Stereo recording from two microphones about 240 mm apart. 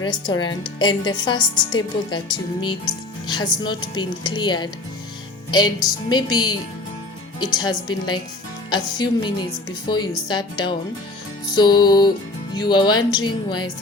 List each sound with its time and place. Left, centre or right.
0.0 s a woman's voice: centre